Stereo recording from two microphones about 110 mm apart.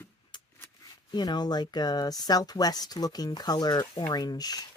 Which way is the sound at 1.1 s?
40° left (ahead or behind).